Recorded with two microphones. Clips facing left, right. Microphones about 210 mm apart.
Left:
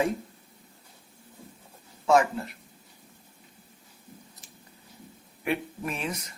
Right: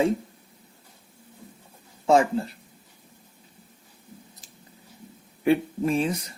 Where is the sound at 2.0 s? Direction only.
30° right (ahead or behind).